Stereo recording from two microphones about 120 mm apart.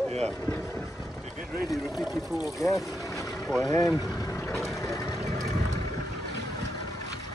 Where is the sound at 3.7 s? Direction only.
30° left (ahead or behind).